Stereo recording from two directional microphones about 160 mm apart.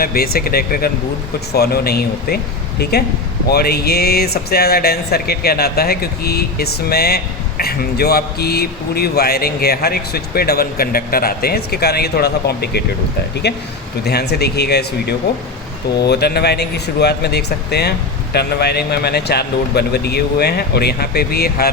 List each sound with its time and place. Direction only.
0.0 s speech: 70° left (ahead or behind)